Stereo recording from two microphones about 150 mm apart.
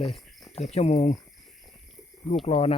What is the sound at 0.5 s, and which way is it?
Speech, 45° left (ahead or behind).